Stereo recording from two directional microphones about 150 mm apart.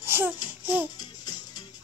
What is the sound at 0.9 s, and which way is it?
Music, 25° left (ahead or behind).